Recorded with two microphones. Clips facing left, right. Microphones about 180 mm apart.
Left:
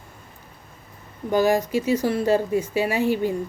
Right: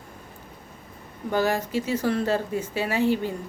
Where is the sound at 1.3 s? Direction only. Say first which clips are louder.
Left 5 dB; 10° left (ahead or behind).